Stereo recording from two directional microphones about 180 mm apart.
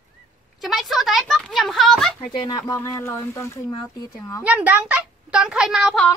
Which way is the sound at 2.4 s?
20° left (ahead or behind).